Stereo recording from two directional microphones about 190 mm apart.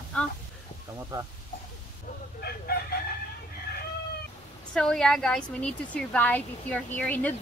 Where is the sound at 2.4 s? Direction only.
60° left (ahead or behind).